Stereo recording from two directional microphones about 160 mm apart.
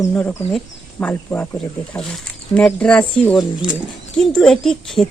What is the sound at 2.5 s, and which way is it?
Speech, 5° left (ahead or behind).